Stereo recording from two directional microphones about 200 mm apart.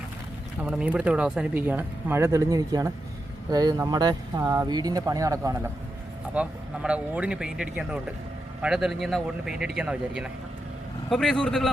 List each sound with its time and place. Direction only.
0.6 s speech: 5° right (ahead or behind)